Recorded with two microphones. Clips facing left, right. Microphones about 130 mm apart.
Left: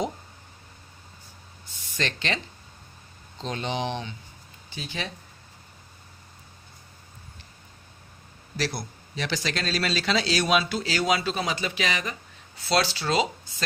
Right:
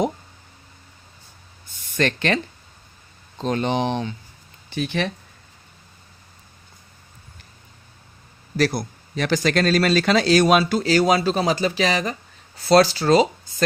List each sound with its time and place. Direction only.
1.7 s a sound: 55° right (ahead or behind)
3.4 s speech: 50° right (ahead or behind)
4.7 s speech: 65° right (ahead or behind)
8.5 s speech: 50° right (ahead or behind)